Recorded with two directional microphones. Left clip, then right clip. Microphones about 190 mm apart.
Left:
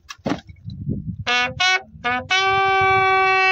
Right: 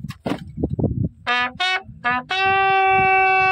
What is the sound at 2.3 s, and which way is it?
Music, 20° left (ahead or behind).